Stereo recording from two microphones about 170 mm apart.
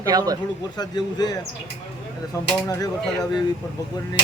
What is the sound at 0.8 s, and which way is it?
Speech, 25° left (ahead or behind).